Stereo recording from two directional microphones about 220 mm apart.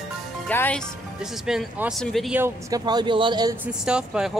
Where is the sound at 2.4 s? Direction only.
15° right (ahead or behind).